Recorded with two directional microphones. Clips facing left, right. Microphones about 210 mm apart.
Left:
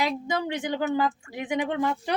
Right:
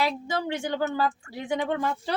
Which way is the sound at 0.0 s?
20° left (ahead or behind).